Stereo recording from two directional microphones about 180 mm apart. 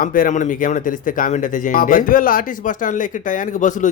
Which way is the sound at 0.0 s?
50° left (ahead or behind).